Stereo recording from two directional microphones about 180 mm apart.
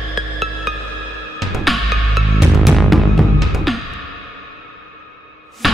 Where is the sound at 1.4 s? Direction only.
Centre (ahead or behind).